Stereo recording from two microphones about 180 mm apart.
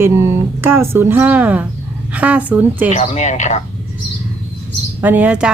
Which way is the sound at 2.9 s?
40° left (ahead or behind).